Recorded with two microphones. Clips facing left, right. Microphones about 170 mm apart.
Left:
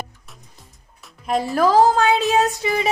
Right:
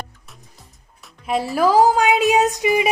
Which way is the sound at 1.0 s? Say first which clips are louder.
Even; centre (ahead or behind).